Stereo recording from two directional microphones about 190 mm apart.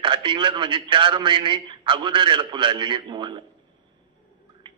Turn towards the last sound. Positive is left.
turn(degrees=-25)  # may be behind; listen again after turning